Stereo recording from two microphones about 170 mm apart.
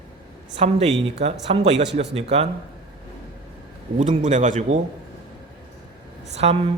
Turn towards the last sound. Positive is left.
turn(degrees=-40)  # may be behind; listen again after turning